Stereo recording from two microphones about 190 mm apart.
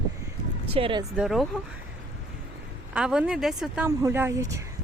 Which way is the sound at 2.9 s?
5° right (ahead or behind).